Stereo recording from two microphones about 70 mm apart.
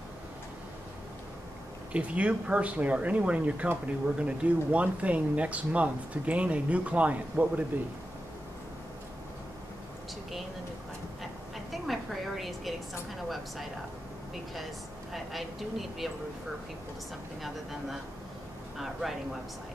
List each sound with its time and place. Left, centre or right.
1.9 s speech: centre
11.7 s a sound: centre
15.1 s speech: centre
18.8 s speech: centre